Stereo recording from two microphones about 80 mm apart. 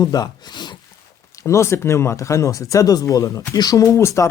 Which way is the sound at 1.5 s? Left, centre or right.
Left.